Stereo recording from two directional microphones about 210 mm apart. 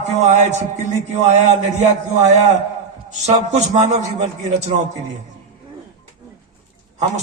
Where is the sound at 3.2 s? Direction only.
35° right (ahead or behind).